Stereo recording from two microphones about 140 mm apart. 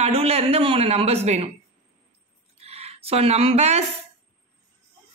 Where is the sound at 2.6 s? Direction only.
50° right (ahead or behind).